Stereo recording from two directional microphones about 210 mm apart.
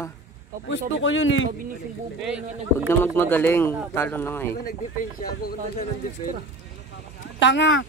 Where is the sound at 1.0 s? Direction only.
65° left (ahead or behind).